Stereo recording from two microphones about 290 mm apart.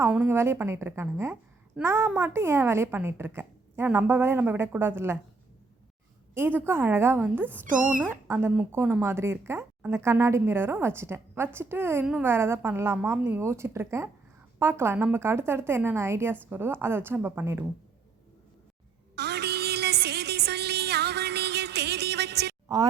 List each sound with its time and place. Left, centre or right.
0.0 s speech: centre
6.3 s speech: centre
7.6 s speech: right
7.9 s speech: centre
19.1 s a sound: right